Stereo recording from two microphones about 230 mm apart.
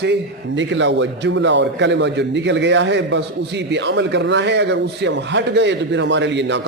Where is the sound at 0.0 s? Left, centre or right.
Right.